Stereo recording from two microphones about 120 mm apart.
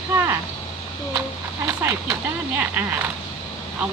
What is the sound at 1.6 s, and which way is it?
A woman's voice, 25° right (ahead or behind).